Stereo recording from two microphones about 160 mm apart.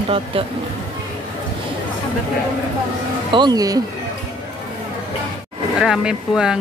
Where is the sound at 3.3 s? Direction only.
25° right (ahead or behind).